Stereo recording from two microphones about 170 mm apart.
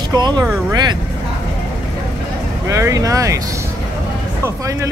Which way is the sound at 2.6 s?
20° right (ahead or behind).